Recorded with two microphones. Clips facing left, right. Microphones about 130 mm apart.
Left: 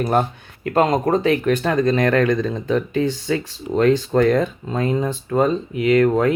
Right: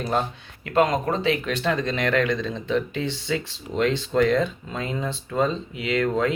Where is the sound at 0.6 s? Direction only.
35° left (ahead or behind).